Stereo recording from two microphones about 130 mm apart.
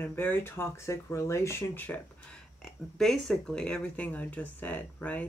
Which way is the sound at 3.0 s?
5° left (ahead or behind).